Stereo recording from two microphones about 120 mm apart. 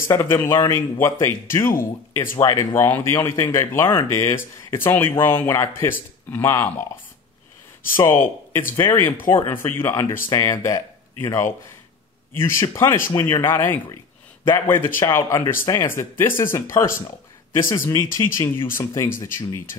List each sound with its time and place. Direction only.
0.1 s speech: 20° left (ahead or behind)
7.9 s speech: 20° left (ahead or behind)